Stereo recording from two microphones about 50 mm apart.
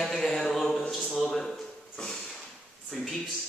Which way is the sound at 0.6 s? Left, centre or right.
Centre.